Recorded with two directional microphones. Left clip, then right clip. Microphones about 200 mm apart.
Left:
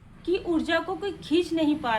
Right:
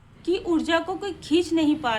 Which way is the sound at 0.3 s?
15° right (ahead or behind).